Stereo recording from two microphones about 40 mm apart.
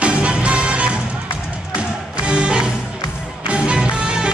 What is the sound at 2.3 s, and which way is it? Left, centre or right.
Music, right.